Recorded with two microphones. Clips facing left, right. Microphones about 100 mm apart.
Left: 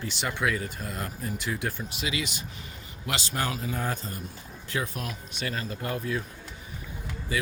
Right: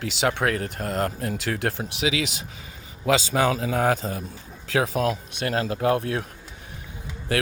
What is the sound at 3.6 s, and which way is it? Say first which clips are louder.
Speech: right 9 dB; 90° right.